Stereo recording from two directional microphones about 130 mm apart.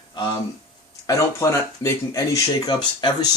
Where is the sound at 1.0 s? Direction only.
20° left (ahead or behind).